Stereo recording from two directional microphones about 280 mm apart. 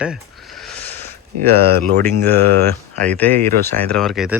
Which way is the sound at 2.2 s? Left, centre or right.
Right.